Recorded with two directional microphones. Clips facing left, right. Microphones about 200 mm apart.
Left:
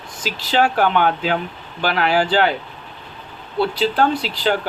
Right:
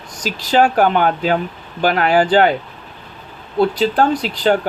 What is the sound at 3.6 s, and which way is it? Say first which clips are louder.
Speech: right 4 dB; 45° right (ahead or behind).